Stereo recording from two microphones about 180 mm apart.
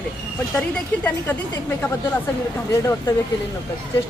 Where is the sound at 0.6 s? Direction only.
10° left (ahead or behind).